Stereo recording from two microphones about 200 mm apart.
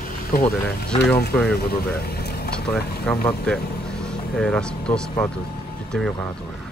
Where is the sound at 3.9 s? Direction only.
5° left (ahead or behind).